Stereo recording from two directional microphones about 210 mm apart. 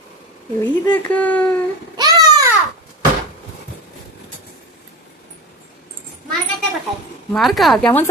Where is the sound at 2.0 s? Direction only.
20° right (ahead or behind).